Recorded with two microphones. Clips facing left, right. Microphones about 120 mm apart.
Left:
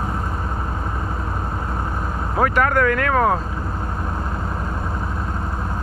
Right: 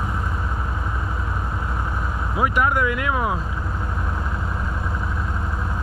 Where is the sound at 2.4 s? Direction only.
15° right (ahead or behind).